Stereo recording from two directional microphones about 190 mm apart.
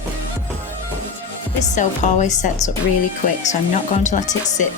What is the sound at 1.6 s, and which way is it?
A woman's voice, 40° left (ahead or behind).